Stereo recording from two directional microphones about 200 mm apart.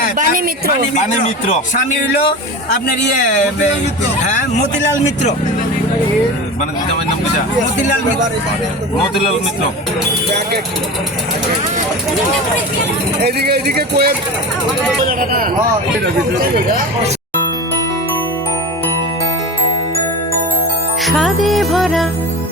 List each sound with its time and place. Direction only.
0.2 s speech: 45° right (ahead or behind)
4.4 s speech: 40° left (ahead or behind)
13.2 s speech: 50° right (ahead or behind)
21.1 s music: centre (ahead or behind)